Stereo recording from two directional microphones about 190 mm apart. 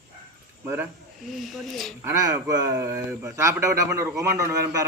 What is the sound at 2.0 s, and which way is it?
Speech, 15° right (ahead or behind).